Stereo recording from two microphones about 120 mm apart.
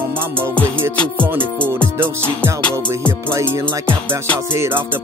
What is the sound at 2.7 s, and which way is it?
Music, 20° right (ahead or behind).